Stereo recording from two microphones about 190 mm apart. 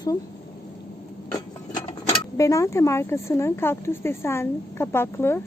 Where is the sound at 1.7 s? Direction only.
20° left (ahead or behind).